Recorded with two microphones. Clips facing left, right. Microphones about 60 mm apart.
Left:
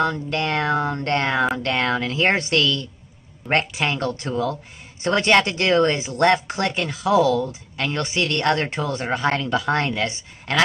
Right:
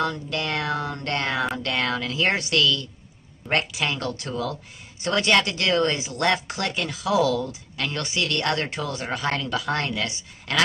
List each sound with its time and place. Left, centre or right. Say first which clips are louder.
0.0 s speech: left 4 dB; left